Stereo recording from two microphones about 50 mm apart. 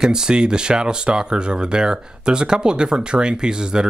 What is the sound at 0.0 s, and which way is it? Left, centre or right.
Speech, centre.